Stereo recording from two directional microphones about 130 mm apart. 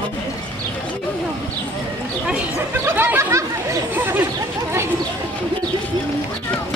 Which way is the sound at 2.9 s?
15° right (ahead or behind).